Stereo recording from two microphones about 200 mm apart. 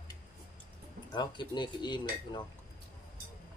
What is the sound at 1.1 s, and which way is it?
Speech, 20° left (ahead or behind).